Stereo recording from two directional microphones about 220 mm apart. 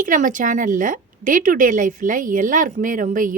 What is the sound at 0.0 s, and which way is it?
A woman's voice, 35° right (ahead or behind).